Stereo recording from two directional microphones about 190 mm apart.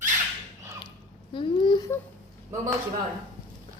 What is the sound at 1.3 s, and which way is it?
Babbling, 25° left (ahead or behind).